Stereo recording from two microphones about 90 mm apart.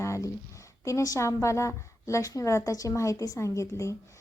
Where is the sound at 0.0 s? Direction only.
35° left (ahead or behind).